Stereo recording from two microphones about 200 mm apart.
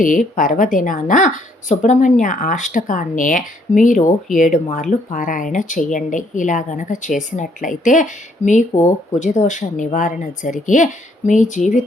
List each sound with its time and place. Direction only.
0.0 s speech: 40° left (ahead or behind)